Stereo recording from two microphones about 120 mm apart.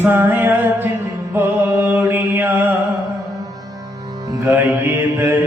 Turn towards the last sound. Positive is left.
turn(degrees=-20)  # may be behind; listen again after turning